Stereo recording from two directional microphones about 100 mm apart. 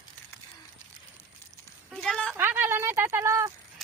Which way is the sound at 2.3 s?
20° right (ahead or behind).